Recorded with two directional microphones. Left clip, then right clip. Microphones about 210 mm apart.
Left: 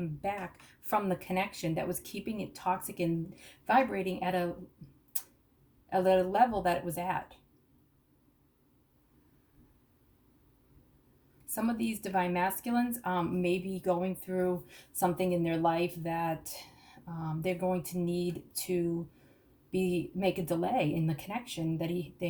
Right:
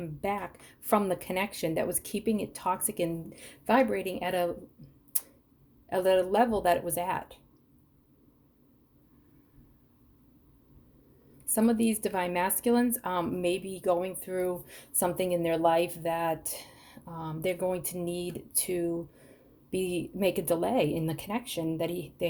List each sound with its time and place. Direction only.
0.9 s a woman's voice: 50° right (ahead or behind)
5.9 s a woman's voice: 55° right (ahead or behind)
11.4 s a woman's voice: 55° right (ahead or behind)